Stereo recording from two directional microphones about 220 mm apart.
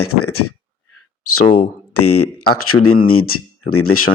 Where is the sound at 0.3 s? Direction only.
85° left.